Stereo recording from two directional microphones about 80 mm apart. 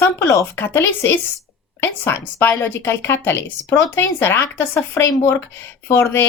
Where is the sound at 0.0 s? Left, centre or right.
Left.